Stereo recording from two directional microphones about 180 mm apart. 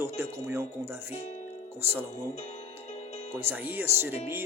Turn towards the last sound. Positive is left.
turn(degrees=-15)  # may be behind; listen again after turning